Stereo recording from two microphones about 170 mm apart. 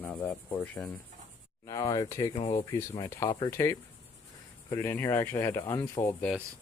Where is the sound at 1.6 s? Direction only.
20° left (ahead or behind).